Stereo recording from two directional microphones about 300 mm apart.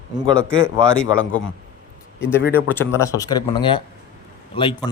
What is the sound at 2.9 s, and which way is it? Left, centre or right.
A man's voice, centre.